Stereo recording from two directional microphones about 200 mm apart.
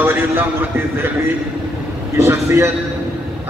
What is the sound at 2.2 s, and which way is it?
Speech, 15° right (ahead or behind).